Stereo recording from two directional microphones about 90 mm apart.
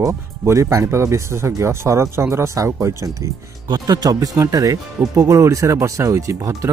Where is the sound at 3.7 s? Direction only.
45° right (ahead or behind).